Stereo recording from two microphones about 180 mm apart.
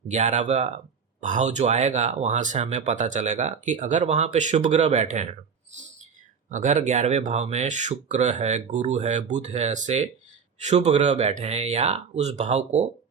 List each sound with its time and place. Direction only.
0.1 s speech: 40° right (ahead or behind)
6.5 s speech: 45° right (ahead or behind)